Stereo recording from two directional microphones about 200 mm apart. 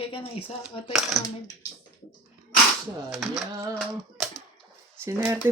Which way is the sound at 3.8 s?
Centre (ahead or behind).